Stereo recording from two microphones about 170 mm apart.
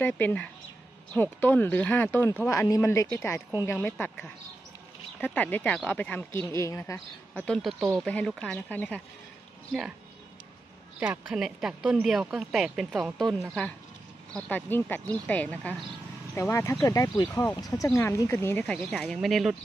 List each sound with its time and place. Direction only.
0.0 s speech: 10° left (ahead or behind)
7.4 s speech: 5° left (ahead or behind)
9.7 s speech: 5° right (ahead or behind)
11.0 s speech: 5° right (ahead or behind)